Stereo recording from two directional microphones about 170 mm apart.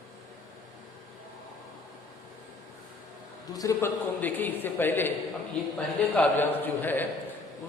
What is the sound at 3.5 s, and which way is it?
A man's voice, 15° left (ahead or behind).